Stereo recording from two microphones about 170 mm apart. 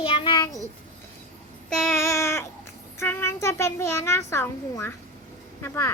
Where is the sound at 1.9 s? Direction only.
15° left (ahead or behind).